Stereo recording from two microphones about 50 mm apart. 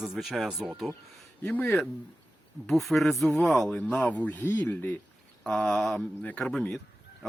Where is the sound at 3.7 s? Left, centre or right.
Left.